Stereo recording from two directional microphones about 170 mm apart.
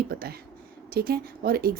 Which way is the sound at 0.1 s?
65° right (ahead or behind).